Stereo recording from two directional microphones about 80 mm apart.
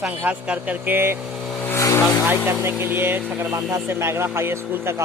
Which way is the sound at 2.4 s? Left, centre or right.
Right.